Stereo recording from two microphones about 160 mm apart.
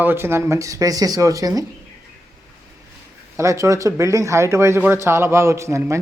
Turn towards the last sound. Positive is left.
turn(degrees=-15)  # may be behind; listen again after turning